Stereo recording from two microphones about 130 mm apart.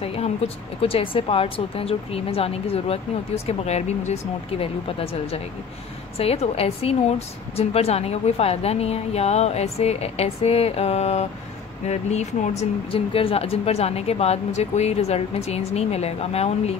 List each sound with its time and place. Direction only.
0.0 s a sound: 50° left (ahead or behind)
0.7 s a woman's voice: 45° left (ahead or behind)
12.9 s a woman's voice: 45° left (ahead or behind)